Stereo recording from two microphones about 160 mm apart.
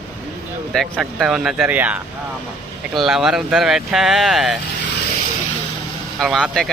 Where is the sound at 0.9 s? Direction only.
5° right (ahead or behind).